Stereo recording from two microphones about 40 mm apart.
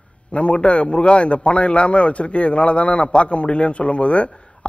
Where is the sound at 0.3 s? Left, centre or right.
Left.